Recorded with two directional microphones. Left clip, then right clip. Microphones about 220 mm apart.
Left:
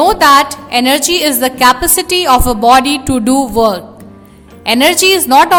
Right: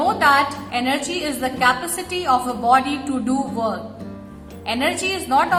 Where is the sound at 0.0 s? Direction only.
55° left (ahead or behind).